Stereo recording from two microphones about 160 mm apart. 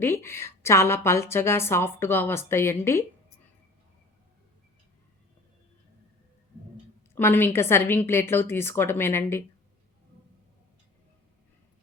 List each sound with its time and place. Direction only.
0.0 s a woman's voice: 15° left (ahead or behind)
7.2 s a woman's voice: 15° left (ahead or behind)